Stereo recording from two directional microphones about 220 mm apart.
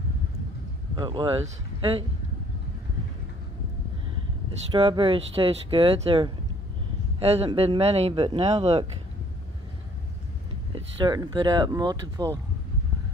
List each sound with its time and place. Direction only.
0.9 s speech: 20° right (ahead or behind)
4.7 s speech: 25° right (ahead or behind)
10.7 s speech: 20° right (ahead or behind)